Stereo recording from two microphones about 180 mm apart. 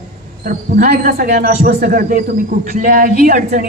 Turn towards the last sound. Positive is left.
turn(degrees=-50)  # may be behind; listen again after turning